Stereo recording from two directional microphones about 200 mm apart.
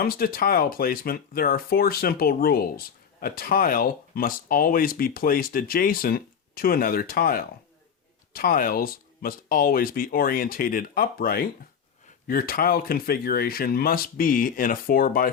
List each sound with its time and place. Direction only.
0.0 s speech: 45° left (ahead or behind)